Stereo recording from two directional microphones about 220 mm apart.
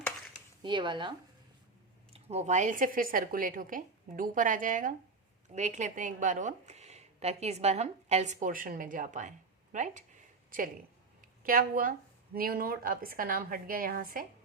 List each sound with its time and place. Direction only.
0.6 s speech: 20° right (ahead or behind)
2.1 s a woman's voice: 30° right (ahead or behind)
11.4 s a woman's voice: 40° right (ahead or behind)